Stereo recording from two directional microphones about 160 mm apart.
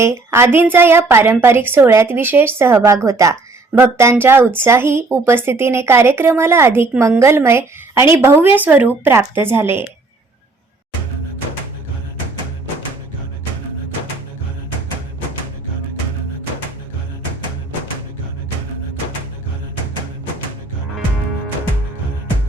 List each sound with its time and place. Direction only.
0.0 s a woman's voice: 15° right (ahead or behind)